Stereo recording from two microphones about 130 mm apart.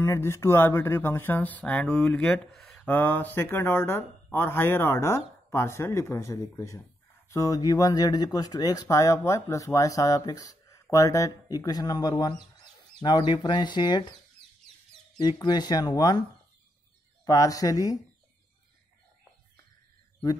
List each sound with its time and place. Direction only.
0.0 s speech: 20° left (ahead or behind); by 14.0 s 35° left (ahead or behind)
15.1 s speech: 30° left (ahead or behind)